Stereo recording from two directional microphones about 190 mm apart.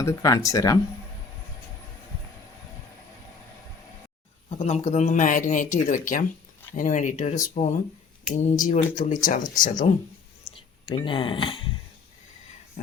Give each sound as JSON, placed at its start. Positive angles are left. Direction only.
{"t": 0.0, "sound": "speech", "side_deg": 15}
{"t": 4.6, "sound": "speech", "side_deg": 35}
{"t": 10.5, "sound": "speech", "side_deg": 30}
{"t": 12.8, "sound": "a sound", "side_deg": 40}